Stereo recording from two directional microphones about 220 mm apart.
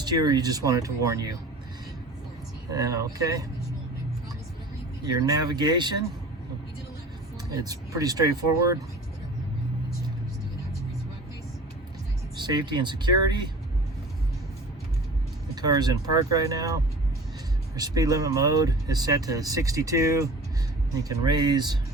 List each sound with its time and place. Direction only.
0.0 s speech: 20° right (ahead or behind)
2.6 s speech: 15° right (ahead or behind)
5.2 s speech: 20° right (ahead or behind)
7.5 s speech: 15° right (ahead or behind)
12.4 s speech: 20° right (ahead or behind)
15.6 s speech: 20° right (ahead or behind)
17.7 s speech: 15° right (ahead or behind)